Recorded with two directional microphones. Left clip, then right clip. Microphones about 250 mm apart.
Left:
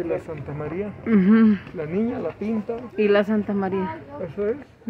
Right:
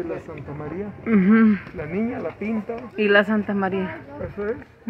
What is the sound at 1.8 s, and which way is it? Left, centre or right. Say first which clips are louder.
Speech: left 1 dB; left.